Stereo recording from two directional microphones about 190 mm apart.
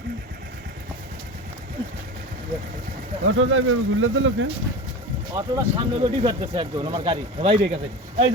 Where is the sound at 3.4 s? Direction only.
90° right.